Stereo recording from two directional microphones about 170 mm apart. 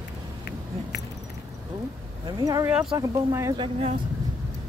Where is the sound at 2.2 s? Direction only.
20° right (ahead or behind).